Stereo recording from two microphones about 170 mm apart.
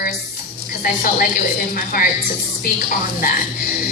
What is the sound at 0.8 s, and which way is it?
A woman's voice, 55° left (ahead or behind).